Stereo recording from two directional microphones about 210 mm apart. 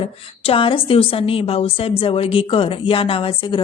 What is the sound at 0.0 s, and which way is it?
A woman's voice, 25° left (ahead or behind).